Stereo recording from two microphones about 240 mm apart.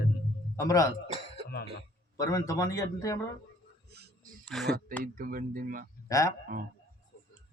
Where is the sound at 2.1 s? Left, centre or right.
Centre.